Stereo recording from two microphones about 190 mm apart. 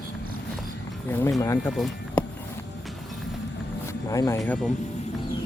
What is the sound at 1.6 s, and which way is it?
Speech, centre (ahead or behind).